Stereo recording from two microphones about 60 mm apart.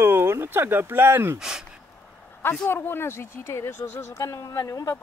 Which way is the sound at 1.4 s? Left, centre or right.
Centre.